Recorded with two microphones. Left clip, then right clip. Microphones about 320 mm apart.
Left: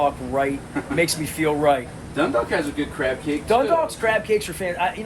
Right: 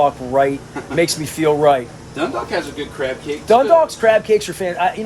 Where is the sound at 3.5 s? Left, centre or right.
Right.